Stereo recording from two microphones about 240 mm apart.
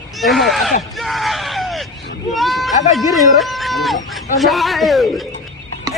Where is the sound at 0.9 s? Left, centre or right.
Centre.